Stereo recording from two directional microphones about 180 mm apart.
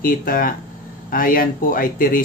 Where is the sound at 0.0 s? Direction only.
50° left (ahead or behind).